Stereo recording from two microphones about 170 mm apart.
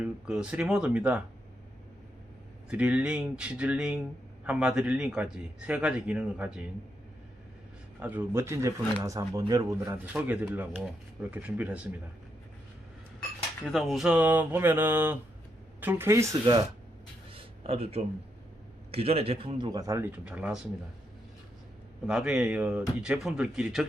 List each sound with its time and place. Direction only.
0.0 s a man's voice: 5° right (ahead or behind)
2.6 s a man's voice: 10° right (ahead or behind)
7.9 s a man's voice: 10° right (ahead or behind)
13.7 s a man's voice: centre (ahead or behind); by 16.2 s 15° right (ahead or behind)
17.3 s a sound: 35° right (ahead or behind)
18.9 s a man's voice: 35° right (ahead or behind); by 20.6 s 5° right (ahead or behind)
22.0 s speech: 5° right (ahead or behind)